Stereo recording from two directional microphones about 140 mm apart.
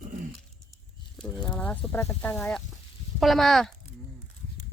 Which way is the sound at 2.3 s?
5° left (ahead or behind).